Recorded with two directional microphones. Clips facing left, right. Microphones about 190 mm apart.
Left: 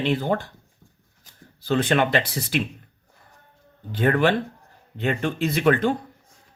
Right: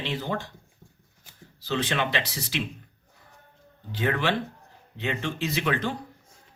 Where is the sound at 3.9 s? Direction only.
50° left (ahead or behind).